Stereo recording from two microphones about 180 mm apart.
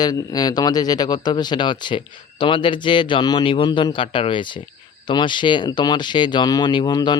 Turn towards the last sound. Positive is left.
turn(degrees=25)  # may be behind; listen again after turning